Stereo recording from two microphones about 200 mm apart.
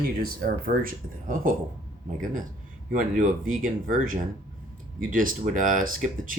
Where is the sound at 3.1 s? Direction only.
40° right (ahead or behind).